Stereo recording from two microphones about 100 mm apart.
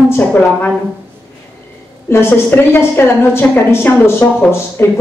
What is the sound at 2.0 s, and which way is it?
A woman's voice, 25° left (ahead or behind).